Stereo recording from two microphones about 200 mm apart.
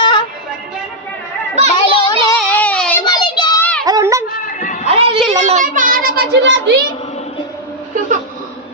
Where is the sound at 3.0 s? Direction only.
20° left (ahead or behind).